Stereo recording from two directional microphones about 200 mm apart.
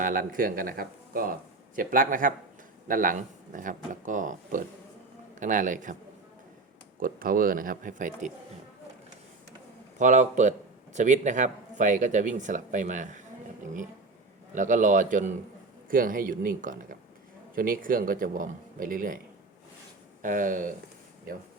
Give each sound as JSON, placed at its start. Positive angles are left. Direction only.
{"t": 0.0, "sound": "speech", "side_deg": -45}
{"t": 7.0, "sound": "speech", "side_deg": -45}
{"t": 10.0, "sound": "speech", "side_deg": -35}
{"t": 14.5, "sound": "speech", "side_deg": -40}
{"t": 20.2, "sound": "speech", "side_deg": -40}